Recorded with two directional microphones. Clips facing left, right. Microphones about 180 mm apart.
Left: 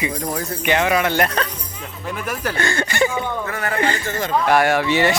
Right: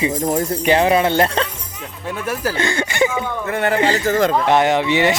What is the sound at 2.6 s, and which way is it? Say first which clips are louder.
Speech: even; 15° right (ahead or behind).